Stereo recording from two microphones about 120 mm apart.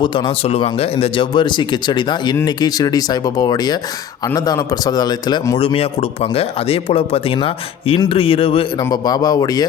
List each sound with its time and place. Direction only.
0.0 s speech: 45° left (ahead or behind)
5.5 s speech: 50° left (ahead or behind)
8.8 s speech: 35° left (ahead or behind)